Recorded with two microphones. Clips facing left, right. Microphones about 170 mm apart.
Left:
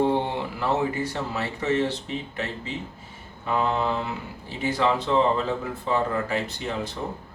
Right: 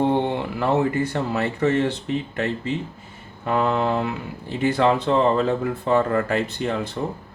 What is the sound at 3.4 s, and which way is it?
Speech, 60° right (ahead or behind).